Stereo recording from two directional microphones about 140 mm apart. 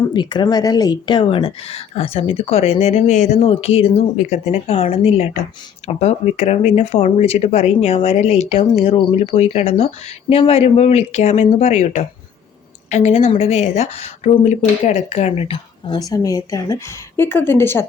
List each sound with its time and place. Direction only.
0.1 s speech: 35° left (ahead or behind); by 3.3 s 60° left (ahead or behind)
3.4 s speech: 45° left (ahead or behind)
4.2 s speech: 55° left (ahead or behind); by 16.0 s 40° left (ahead or behind)
16.0 s a woman's voice: 25° left (ahead or behind)